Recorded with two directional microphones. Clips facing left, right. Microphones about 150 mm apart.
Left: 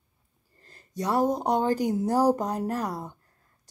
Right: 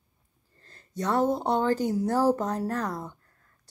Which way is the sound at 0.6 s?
15° left (ahead or behind).